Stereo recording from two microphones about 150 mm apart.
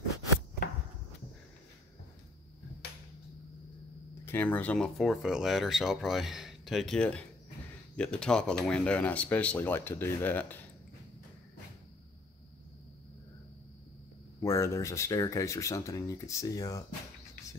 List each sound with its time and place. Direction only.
4.3 s speech: 10° left (ahead or behind)
14.4 s speech: 20° left (ahead or behind)